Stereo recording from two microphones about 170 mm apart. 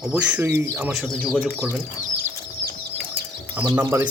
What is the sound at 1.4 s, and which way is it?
Speech, 15° right (ahead or behind).